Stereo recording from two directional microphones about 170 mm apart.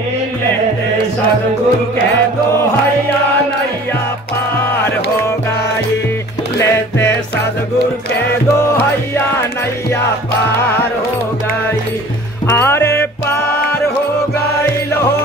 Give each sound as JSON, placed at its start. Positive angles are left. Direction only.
{"t": 6.6, "sound": "music", "side_deg": 15}
{"t": 12.4, "sound": "music", "side_deg": 15}